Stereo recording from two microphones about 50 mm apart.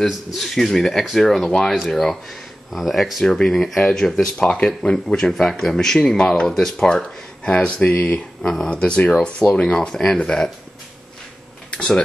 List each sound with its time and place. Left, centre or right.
0.0 s a man's voice: centre
7.4 s speech: left
8.4 s a man's voice: centre